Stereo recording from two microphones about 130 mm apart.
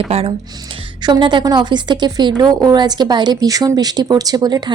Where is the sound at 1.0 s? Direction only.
35° right (ahead or behind).